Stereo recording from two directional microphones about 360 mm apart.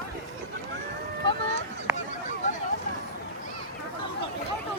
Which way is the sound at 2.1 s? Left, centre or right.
Left.